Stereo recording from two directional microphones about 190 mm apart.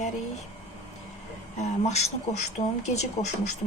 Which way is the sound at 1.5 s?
35° left (ahead or behind).